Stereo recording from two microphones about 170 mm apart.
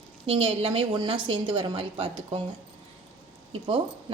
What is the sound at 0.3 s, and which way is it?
A woman's voice, 35° right (ahead or behind).